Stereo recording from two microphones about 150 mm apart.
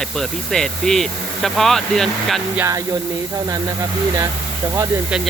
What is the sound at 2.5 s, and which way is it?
Music, 20° right (ahead or behind).